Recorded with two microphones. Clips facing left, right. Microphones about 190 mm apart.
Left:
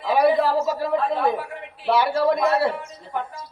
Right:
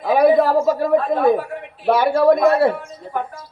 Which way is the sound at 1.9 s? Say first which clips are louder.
Right 5 dB; 50° right (ahead or behind).